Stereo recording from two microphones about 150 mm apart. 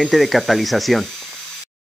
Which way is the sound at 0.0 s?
Centre (ahead or behind).